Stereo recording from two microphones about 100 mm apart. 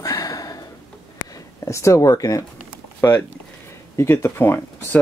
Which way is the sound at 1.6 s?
30° left (ahead or behind).